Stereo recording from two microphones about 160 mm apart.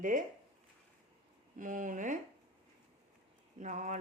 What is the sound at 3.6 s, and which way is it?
Speech, 50° right (ahead or behind).